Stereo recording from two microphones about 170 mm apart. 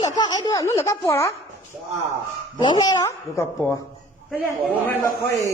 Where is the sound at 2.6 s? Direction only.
25° left (ahead or behind).